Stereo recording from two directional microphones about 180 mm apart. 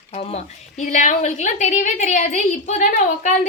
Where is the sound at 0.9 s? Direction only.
40° left (ahead or behind).